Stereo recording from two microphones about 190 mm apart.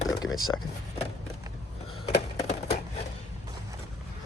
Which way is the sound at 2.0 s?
35° left (ahead or behind).